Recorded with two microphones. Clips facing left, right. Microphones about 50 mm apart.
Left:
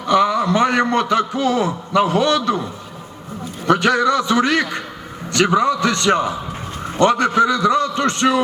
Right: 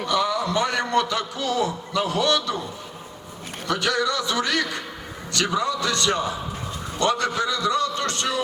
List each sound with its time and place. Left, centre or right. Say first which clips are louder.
0.1 s a man's voice: left 8 dB; left
3.7 s a man's voice: left 8 dB; left